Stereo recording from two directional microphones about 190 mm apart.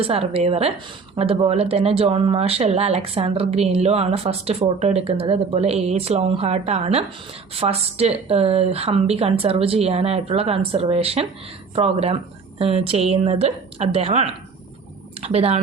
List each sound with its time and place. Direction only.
0.0 s speech: 30° right (ahead or behind)